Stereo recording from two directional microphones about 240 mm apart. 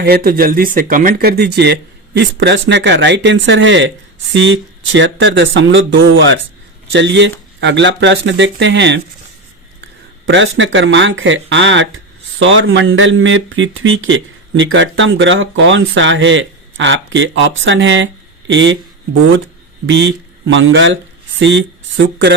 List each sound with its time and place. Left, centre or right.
0.0 s speech: right
10.2 s speech: right
20.5 s speech: right